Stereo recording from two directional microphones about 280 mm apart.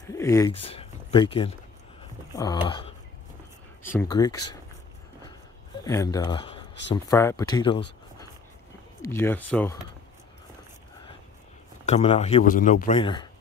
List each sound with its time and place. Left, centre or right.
0.1 s speech: centre
5.9 s speech: centre
9.0 s speech: centre
11.8 s a man's voice: left